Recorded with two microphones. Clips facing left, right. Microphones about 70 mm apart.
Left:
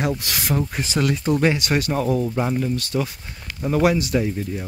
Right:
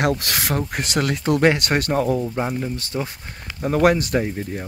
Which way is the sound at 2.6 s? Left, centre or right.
Right.